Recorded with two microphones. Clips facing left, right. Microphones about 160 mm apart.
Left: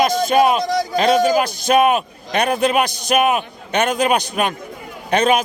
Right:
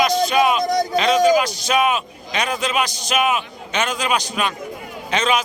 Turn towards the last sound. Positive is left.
turn(degrees=55)  # may be behind; listen again after turning